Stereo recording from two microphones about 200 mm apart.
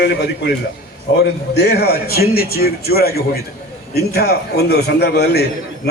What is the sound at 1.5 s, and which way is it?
A man's voice, 55° left (ahead or behind).